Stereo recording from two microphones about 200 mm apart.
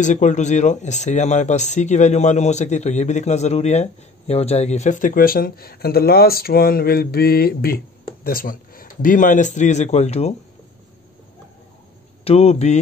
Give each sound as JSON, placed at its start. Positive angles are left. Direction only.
{"t": 0.0, "sound": "speech", "side_deg": 35}
{"t": 12.3, "sound": "speech", "side_deg": 30}